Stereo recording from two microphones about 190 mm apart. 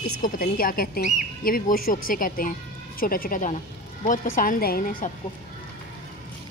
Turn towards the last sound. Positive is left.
turn(degrees=50)  # may be behind; listen again after turning